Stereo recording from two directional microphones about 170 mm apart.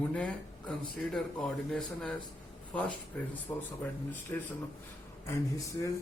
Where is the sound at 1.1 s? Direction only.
5° left (ahead or behind).